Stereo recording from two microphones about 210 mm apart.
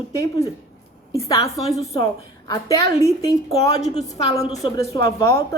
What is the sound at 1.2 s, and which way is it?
Speech, 15° left (ahead or behind).